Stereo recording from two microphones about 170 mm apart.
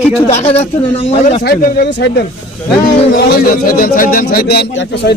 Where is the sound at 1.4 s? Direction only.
65° left (ahead or behind); by 2.2 s 85° left.